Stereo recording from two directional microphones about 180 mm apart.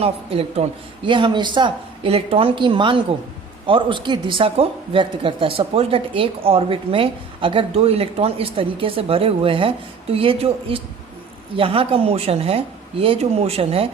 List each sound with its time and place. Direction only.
0.0 s speech: 35° right (ahead or behind)